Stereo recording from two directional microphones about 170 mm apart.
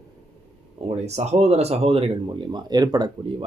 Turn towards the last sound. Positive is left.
turn(degrees=-25)  # may be behind; listen again after turning